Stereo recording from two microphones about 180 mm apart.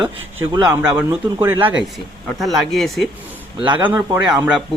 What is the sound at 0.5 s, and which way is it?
Speech, 20° right (ahead or behind).